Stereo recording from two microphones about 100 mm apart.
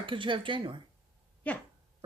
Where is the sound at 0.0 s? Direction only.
55° right (ahead or behind).